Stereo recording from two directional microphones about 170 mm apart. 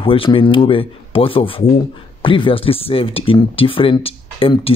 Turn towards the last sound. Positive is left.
turn(degrees=35)  # may be behind; listen again after turning